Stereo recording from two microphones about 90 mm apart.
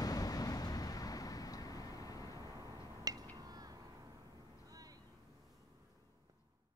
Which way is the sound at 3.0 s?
45° right (ahead or behind).